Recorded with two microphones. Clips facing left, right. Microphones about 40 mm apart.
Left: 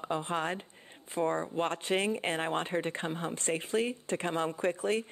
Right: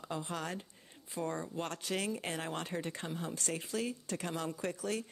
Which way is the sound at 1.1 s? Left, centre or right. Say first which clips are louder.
Left 7 dB; left.